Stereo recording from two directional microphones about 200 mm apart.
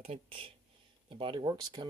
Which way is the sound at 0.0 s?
30° right (ahead or behind).